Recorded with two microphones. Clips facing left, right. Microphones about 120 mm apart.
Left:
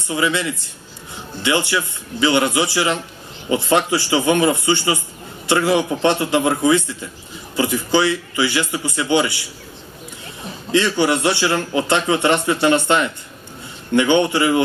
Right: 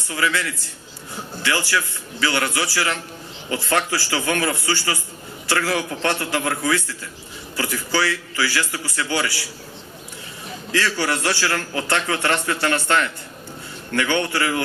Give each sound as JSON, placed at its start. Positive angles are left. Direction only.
{"t": 0.1, "sound": "a man's voice", "side_deg": 20}
{"t": 10.7, "sound": "a man's voice", "side_deg": 20}